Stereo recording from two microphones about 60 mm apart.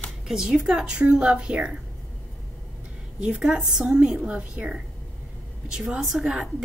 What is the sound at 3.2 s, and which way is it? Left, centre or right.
A woman's voice, centre.